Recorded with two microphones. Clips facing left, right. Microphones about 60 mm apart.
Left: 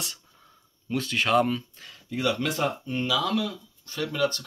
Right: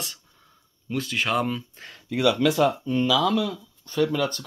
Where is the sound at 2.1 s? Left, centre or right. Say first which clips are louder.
Right 5 dB; right.